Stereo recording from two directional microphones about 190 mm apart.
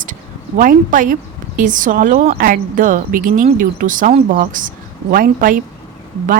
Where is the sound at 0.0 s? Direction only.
45° right (ahead or behind).